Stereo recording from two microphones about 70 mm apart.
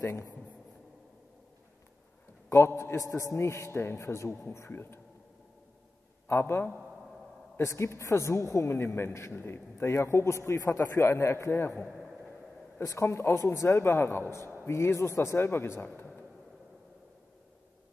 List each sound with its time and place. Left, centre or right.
0.0 s speech: left
2.8 s a man's voice: left
4.5 s a man's voice: left
6.2 s a man's voice: left
9.8 s a man's voice: left
11.7 s a sound: centre
12.8 s a man's voice: left
15.3 s a man's voice: left